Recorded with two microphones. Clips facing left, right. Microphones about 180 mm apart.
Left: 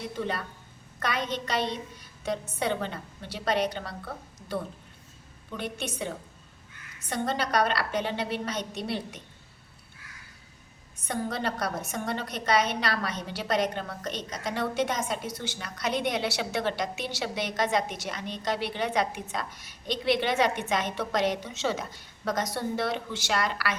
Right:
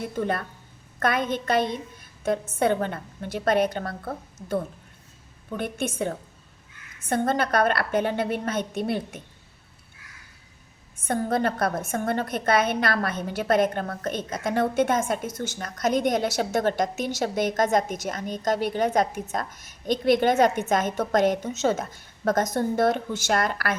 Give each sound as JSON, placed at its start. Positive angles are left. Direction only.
{"t": 0.0, "sound": "a woman's voice", "side_deg": -50}
{"t": 11.0, "sound": "a woman's voice", "side_deg": -50}